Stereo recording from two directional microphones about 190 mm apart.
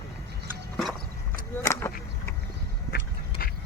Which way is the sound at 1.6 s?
15° left (ahead or behind).